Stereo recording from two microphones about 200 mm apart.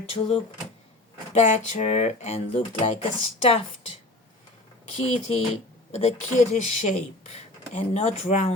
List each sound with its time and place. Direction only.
0.0 s speech: 30° left (ahead or behind)
4.9 s speech: 30° left (ahead or behind)